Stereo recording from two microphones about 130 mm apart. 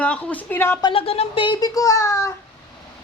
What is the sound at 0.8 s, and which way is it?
Speech, 40° left (ahead or behind).